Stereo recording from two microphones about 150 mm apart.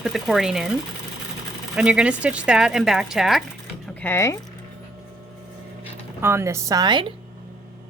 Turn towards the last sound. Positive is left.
turn(degrees=-30)  # may be behind; listen again after turning